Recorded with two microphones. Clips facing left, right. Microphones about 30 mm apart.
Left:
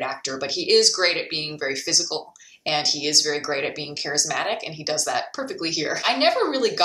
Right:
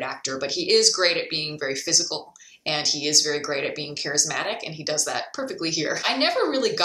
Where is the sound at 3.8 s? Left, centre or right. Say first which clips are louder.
Even; left.